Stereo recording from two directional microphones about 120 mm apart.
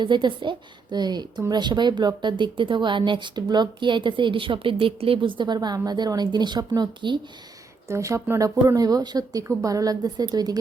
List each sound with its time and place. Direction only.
0.0 s a woman's voice: 40° right (ahead or behind)
7.9 s a woman's voice: 25° right (ahead or behind)